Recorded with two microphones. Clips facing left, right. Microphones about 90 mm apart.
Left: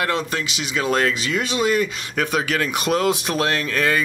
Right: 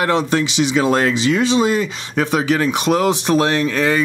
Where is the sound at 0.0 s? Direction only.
25° right (ahead or behind).